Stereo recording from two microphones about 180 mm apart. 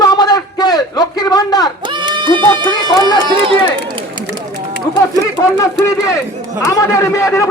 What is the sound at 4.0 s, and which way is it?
Run, 20° right (ahead or behind).